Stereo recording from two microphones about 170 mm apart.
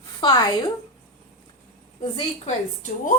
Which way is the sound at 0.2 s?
25° left (ahead or behind).